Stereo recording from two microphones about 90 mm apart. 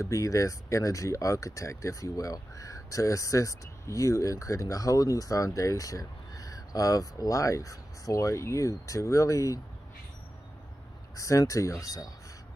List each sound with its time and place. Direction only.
0.0 s speech: 40° left (ahead or behind)
11.1 s speech: 40° left (ahead or behind)